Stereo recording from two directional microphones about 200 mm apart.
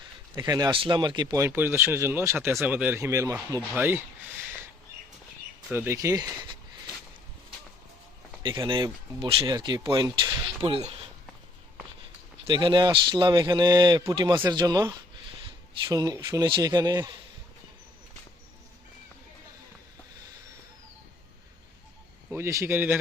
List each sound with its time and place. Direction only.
0.3 s speech: 20° right (ahead or behind)
5.6 s speech: 10° right (ahead or behind)
8.4 s speech: 25° right (ahead or behind)
12.5 s speech: 25° right (ahead or behind)
22.3 s speech: 15° right (ahead or behind)